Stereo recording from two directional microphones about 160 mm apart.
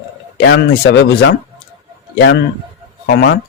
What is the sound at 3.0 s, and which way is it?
Speech, 90° left.